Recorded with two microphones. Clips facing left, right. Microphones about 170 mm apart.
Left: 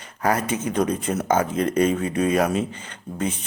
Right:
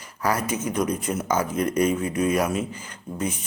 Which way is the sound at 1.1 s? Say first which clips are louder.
Left 5 dB; 65° left (ahead or behind).